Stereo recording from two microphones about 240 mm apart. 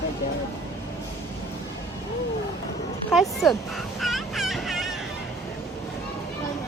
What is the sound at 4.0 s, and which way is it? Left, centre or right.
Fowl, centre.